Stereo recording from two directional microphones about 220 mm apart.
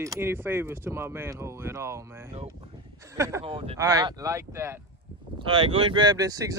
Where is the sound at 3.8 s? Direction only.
15° right (ahead or behind).